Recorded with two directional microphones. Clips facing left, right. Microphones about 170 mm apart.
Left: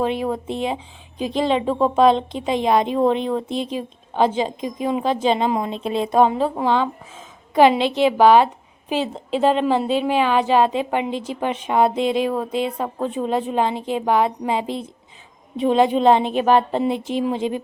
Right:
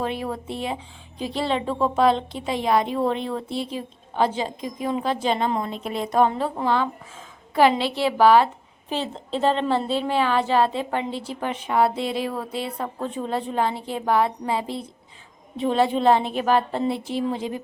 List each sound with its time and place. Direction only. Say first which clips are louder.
0.0 s a woman's voice: left 5 dB; 20° left (ahead or behind)